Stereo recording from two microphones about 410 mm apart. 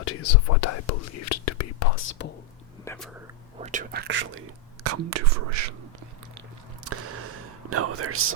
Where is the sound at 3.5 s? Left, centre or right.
Centre.